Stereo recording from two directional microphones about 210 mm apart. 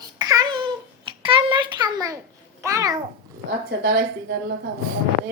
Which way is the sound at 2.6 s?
15° right (ahead or behind).